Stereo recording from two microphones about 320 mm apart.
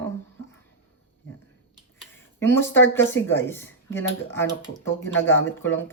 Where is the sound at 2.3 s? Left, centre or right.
Centre.